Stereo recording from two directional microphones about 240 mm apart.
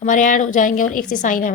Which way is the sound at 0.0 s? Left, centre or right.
Left.